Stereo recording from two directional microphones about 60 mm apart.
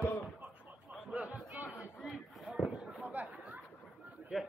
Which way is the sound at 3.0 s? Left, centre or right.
Right.